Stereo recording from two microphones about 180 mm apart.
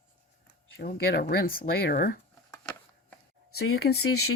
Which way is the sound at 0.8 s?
55° left (ahead or behind).